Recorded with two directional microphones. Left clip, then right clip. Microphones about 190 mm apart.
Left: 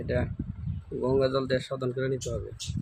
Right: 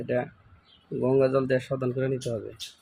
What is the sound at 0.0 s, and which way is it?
Speech, 10° right (ahead or behind).